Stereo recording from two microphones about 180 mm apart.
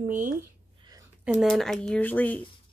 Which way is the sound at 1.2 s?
Centre (ahead or behind).